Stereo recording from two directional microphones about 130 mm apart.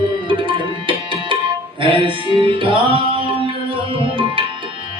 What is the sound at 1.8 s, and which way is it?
Music, 40° right (ahead or behind).